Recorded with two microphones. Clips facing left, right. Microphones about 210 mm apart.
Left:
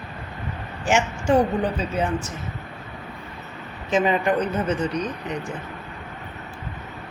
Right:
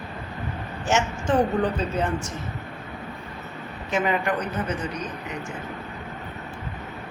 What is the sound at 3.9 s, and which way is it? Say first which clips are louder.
Speech: left 4 dB; 20° left (ahead or behind).